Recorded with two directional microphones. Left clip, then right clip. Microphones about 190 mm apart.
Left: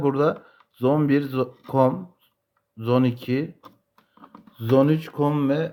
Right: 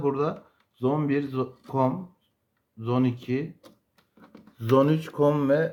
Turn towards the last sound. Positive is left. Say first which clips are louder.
# right 1 dB
turn(degrees=30)  # may be behind; listen again after turning